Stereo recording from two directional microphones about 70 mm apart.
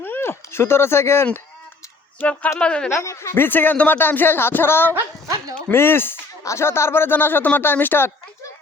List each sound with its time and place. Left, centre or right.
0.0 s speech: left
2.6 s speech: centre
3.0 s speech: left
3.3 s speech: left